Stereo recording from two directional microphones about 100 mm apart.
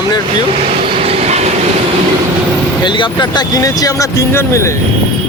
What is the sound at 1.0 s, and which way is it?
Train, 85° right.